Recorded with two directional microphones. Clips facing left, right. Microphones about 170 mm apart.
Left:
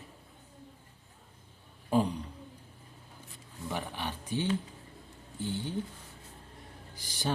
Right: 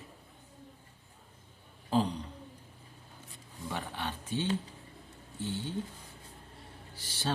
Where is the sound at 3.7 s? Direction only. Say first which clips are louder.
Left 1 dB; 15° left (ahead or behind).